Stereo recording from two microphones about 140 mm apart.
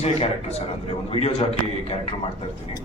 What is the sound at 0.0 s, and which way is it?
Speech, 50° left (ahead or behind).